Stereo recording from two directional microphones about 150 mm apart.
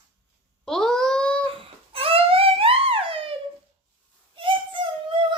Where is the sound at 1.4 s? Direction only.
35° right (ahead or behind).